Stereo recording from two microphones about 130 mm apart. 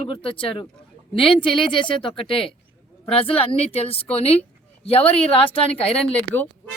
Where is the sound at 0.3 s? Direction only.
45° left (ahead or behind).